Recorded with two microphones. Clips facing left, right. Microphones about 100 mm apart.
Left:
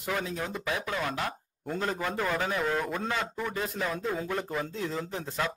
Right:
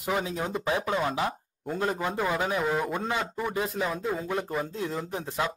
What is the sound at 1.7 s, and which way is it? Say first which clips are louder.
A man's voice: right 2 dB; 10° right (ahead or behind).